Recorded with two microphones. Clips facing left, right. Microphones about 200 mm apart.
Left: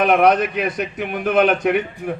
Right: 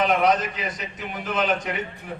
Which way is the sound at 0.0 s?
60° left (ahead or behind).